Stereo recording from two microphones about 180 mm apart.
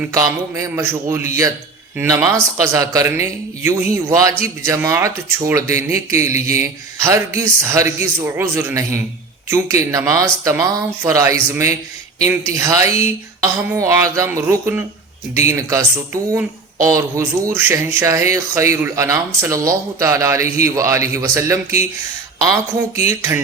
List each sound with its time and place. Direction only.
0.1 s speech: 15° right (ahead or behind)